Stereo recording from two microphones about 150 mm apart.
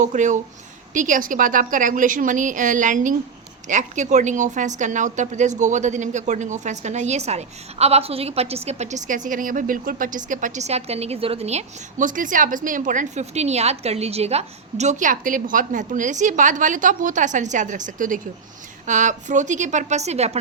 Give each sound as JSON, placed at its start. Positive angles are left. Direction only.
{"t": 0.0, "sound": "a woman's voice", "side_deg": -55}